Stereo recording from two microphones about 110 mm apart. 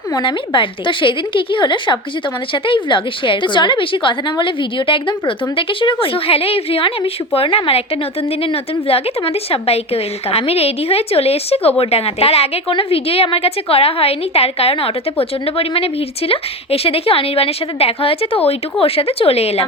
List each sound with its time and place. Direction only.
0.1 s a woman's voice: 45° left (ahead or behind); by 19.6 s 70° left (ahead or behind)